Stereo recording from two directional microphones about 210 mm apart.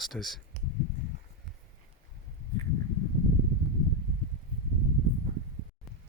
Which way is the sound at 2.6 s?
20° left (ahead or behind).